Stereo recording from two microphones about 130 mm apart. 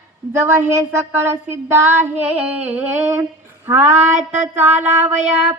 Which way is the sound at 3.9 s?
65° right (ahead or behind).